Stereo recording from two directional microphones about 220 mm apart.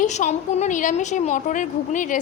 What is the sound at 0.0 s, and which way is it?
A woman's voice, 30° left (ahead or behind).